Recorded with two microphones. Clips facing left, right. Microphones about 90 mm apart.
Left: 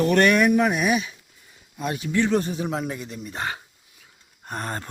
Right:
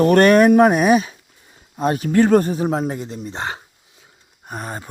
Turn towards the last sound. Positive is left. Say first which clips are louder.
# right 1 dB
turn(degrees=-5)  # may be behind; listen again after turning